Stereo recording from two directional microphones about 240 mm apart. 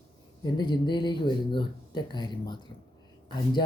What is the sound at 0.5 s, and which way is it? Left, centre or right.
Speech, centre.